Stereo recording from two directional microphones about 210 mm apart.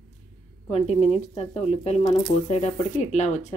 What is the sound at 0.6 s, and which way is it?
Speech, 30° left (ahead or behind).